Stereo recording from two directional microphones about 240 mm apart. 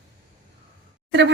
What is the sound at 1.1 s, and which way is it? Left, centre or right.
Speech, right.